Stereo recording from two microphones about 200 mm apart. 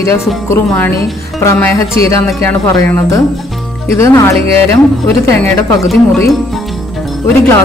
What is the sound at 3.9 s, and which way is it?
Speech, 15° left (ahead or behind).